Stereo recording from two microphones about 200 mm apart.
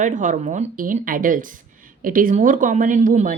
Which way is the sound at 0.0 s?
40° right (ahead or behind).